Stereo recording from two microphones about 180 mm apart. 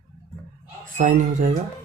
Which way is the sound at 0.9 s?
45° right (ahead or behind).